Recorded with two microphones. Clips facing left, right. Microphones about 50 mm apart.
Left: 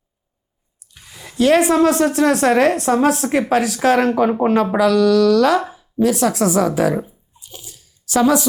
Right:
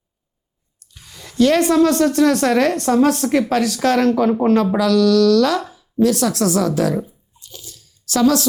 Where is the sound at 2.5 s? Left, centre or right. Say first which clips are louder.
Left 2 dB; centre.